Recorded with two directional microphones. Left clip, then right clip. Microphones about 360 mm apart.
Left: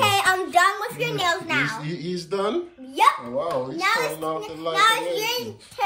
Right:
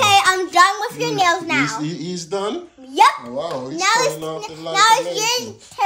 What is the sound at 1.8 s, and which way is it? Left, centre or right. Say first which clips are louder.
Speech: right 3 dB; centre.